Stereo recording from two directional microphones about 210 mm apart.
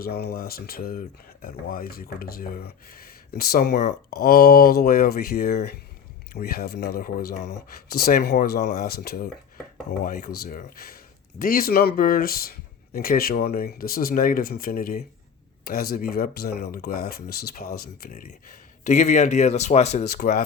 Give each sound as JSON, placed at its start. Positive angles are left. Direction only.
{"t": 0.0, "sound": "speech", "side_deg": 50}